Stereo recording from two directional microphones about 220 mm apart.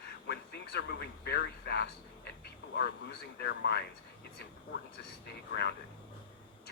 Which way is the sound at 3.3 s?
50° left (ahead or behind).